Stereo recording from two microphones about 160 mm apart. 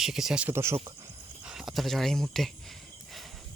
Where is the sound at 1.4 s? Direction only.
5° right (ahead or behind).